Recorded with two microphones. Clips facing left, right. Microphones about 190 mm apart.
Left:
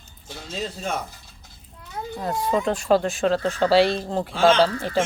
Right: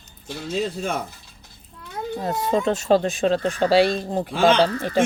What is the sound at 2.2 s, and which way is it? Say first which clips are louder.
Speech: right 1 dB; 25° right (ahead or behind).